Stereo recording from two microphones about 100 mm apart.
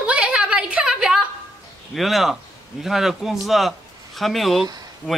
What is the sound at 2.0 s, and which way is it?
Speech, centre (ahead or behind).